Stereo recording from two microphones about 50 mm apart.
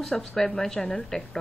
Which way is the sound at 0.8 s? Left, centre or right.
Left.